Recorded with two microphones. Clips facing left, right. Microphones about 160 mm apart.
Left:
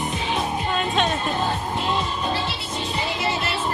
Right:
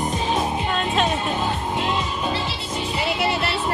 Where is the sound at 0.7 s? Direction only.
Centre (ahead or behind).